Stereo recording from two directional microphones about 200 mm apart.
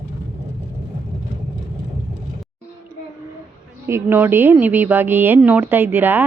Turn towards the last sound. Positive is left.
turn(degrees=-10)  # may be behind; listen again after turning